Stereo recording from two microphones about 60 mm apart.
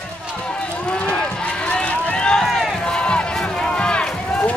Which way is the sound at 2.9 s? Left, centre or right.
Centre.